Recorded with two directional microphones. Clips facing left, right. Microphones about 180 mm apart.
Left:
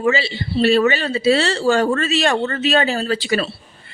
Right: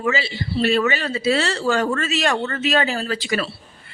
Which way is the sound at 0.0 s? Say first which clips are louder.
Left 4 dB; 30° left (ahead or behind).